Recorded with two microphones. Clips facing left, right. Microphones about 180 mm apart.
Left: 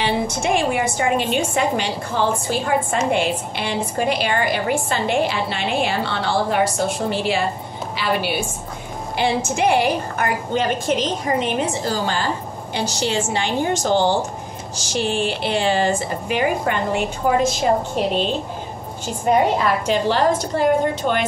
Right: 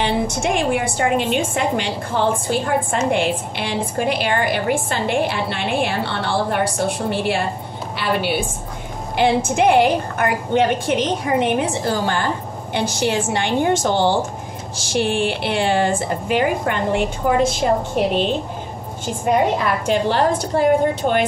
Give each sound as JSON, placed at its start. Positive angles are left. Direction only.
{"t": 0.0, "sound": "a woman's voice", "side_deg": -55}
{"t": 19.9, "sound": "a woman's voice", "side_deg": -55}